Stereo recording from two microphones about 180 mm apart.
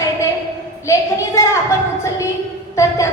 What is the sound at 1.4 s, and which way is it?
A woman's voice, 15° left (ahead or behind).